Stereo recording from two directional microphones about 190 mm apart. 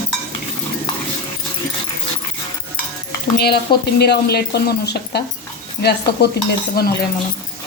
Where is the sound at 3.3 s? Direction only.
55° left (ahead or behind).